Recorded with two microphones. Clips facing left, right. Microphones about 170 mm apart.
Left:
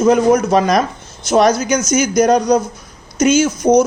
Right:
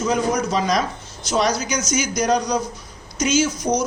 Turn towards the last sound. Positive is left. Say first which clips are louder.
# left 8 dB
turn(degrees=55)  # may be behind; listen again after turning